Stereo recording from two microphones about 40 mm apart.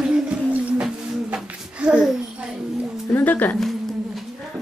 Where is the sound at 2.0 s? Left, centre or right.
Centre.